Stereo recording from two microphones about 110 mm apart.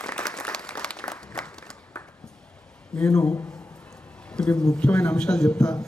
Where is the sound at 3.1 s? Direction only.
30° left (ahead or behind).